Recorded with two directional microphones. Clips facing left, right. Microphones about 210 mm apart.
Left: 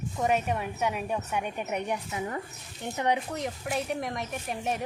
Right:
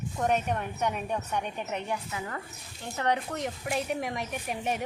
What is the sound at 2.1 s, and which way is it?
Speech, 20° left (ahead or behind).